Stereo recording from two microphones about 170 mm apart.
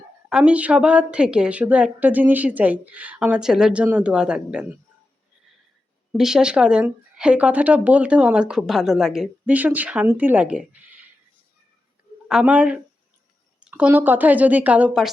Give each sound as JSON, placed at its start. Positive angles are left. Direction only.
{"t": 0.3, "sound": "speech", "side_deg": -5}
{"t": 6.1, "sound": "speech", "side_deg": -5}
{"t": 12.3, "sound": "speech", "side_deg": -5}